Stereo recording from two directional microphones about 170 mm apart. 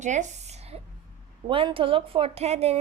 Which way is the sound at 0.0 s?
45° right (ahead or behind).